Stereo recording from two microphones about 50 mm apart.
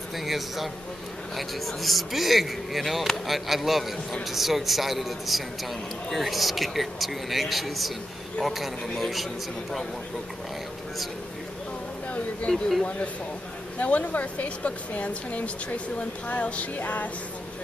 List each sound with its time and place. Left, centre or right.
0.1 s speech: centre
12.4 s speech: centre
13.7 s a woman's voice: left
16.3 s music: left